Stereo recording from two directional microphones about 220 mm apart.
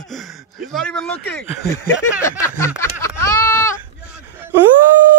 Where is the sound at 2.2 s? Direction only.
10° left (ahead or behind).